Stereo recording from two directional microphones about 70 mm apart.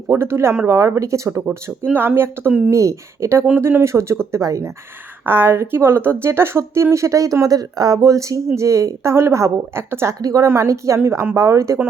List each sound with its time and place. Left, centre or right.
0.1 s a woman's voice: right
1.9 s speech: right
2.6 s a woman's voice: right
5.2 s a woman's voice: right
10.2 s a woman's voice: right